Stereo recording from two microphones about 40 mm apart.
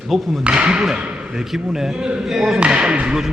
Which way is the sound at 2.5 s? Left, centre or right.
Right.